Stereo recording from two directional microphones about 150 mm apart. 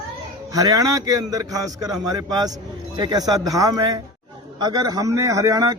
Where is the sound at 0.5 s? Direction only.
25° right (ahead or behind).